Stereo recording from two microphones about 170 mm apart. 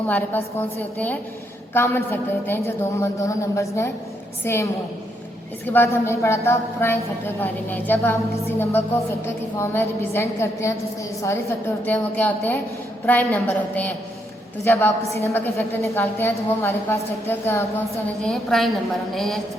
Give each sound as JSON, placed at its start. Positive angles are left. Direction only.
{"t": 0.1, "sound": "a woman's voice", "side_deg": 10}